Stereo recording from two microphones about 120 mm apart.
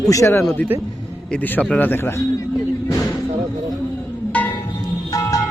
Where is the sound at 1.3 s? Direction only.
10° left (ahead or behind).